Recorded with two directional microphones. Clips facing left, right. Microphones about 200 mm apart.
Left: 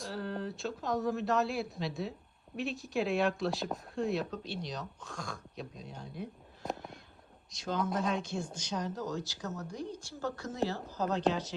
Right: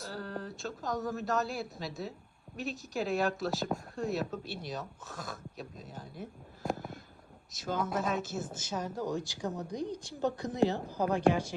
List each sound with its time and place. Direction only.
0.0 s speech: centre (ahead or behind)
5.8 s a sound: 5° right (ahead or behind)
7.5 s a woman's voice: 5° right (ahead or behind)